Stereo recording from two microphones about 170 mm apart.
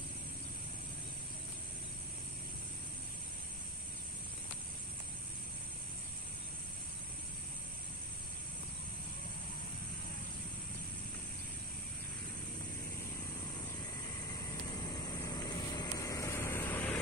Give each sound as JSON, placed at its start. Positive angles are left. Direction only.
{"t": 14.8, "sound": "vehicle", "side_deg": 25}